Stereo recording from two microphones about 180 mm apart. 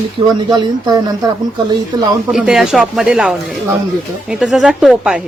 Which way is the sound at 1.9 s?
20° right (ahead or behind).